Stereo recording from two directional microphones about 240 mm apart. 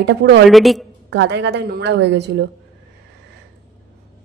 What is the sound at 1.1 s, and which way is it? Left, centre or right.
A woman's voice, right.